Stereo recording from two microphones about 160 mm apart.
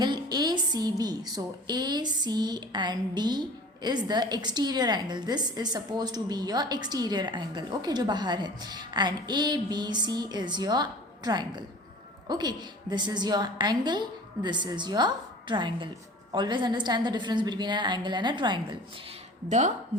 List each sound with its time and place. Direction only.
0.0 s a woman's voice: 25° right (ahead or behind)
19.5 s a woman's voice: 50° right (ahead or behind)